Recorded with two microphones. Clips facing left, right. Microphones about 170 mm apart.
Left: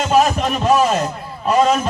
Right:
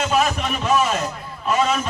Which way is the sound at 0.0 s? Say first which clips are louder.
Left 5 dB; 40° left (ahead or behind).